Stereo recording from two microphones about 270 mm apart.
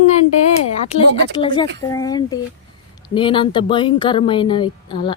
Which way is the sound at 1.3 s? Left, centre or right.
Centre.